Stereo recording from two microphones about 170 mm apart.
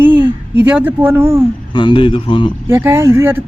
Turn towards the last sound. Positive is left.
turn(degrees=-15)  # may be behind; listen again after turning